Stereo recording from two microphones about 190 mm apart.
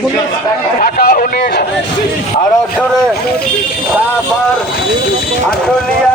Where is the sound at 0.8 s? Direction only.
50° left (ahead or behind).